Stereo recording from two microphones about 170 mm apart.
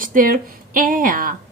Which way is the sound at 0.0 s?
55° right (ahead or behind).